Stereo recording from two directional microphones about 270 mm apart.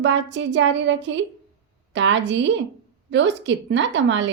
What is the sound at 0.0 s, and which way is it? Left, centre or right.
A woman's voice, right.